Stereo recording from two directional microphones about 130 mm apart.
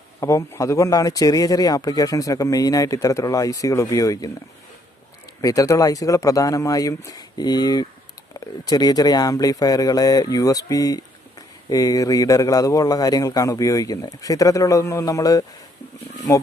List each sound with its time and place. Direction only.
0.2 s speech: 20° left (ahead or behind)
5.4 s speech: 25° left (ahead or behind)